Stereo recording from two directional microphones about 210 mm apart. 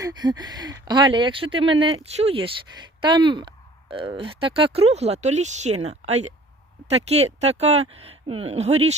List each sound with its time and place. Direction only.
0.0 s speech: 20° right (ahead or behind)